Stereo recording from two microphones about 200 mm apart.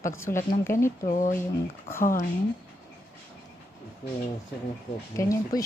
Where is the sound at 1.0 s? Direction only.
40° left (ahead or behind).